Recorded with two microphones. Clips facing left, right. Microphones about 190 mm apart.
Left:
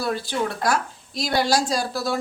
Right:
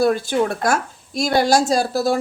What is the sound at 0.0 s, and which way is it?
Speech, 50° right (ahead or behind).